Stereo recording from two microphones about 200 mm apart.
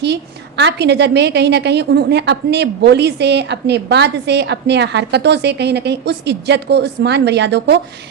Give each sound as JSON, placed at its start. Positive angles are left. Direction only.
{"t": 0.0, "sound": "a woman's voice", "side_deg": -60}